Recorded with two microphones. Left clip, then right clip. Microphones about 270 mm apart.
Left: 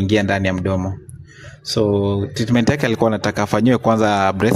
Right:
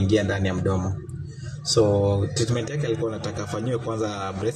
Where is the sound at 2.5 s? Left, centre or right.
Left.